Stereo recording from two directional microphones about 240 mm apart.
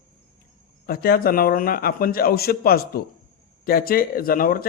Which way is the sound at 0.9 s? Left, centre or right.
Left.